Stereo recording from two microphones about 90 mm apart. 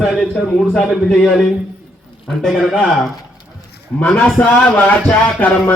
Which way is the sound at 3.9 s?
15° left (ahead or behind).